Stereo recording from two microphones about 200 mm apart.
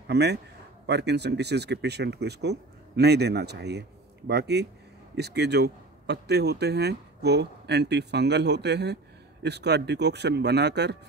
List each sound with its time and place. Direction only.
0.1 s speech: 55° right (ahead or behind)